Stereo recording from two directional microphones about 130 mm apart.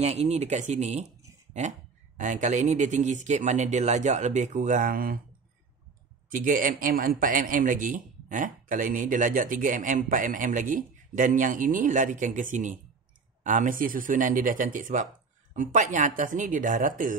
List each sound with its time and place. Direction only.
0.0 s speech: 60° right (ahead or behind)
2.1 s speech: 70° right (ahead or behind); by 5.2 s 90° right
6.3 s a man's voice: 90° right
15.5 s speech: 75° right (ahead or behind)